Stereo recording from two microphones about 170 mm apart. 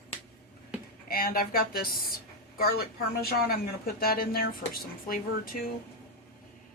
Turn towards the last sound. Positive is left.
turn(degrees=55)  # may be behind; listen again after turning